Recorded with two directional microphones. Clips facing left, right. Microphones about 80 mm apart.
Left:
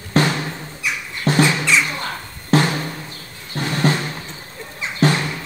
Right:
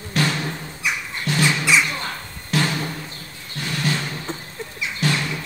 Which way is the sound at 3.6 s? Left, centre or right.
Left.